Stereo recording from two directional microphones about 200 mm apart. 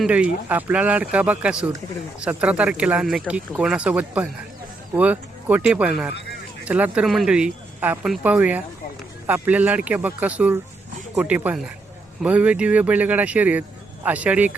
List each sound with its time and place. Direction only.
0.0 s speech: 5° right (ahead or behind)